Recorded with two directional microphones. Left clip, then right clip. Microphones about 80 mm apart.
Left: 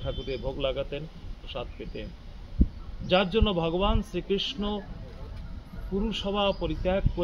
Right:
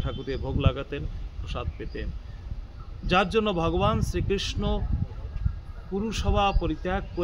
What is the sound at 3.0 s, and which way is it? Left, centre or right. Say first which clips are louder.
A man's voice: right 1 dB; right.